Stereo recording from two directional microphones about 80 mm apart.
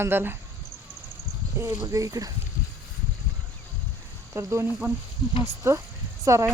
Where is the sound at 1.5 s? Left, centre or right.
Right.